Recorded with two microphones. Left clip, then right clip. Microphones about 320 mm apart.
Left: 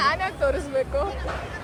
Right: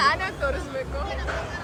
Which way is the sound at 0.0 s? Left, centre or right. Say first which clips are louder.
Even; centre.